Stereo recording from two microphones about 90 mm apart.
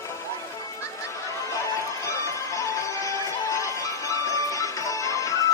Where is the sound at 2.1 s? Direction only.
35° left (ahead or behind).